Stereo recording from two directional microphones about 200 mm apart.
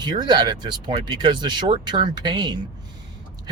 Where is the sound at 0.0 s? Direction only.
20° right (ahead or behind).